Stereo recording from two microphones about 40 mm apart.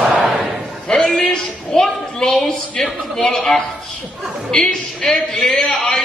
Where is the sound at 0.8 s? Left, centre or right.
Centre.